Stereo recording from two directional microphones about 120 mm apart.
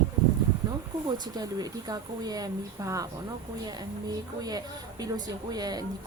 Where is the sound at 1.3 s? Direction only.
30° right (ahead or behind).